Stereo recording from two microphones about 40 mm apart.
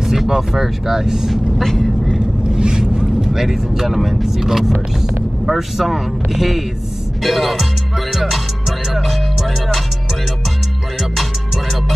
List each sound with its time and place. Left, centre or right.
0.0 s speech: centre
1.8 s vehicle: centre
2.4 s zipper: right
3.3 s speech: centre
8.1 s music: centre
11.0 s music: centre